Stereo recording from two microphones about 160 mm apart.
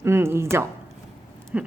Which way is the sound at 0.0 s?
15° right (ahead or behind).